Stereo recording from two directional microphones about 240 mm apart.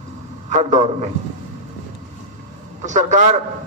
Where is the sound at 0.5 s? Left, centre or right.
Right.